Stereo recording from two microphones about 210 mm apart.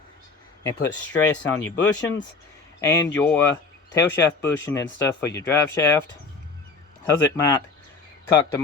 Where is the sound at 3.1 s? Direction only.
10° left (ahead or behind).